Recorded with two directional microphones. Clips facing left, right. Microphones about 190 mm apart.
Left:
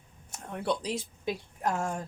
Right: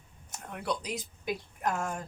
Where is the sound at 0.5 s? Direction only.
30° left (ahead or behind).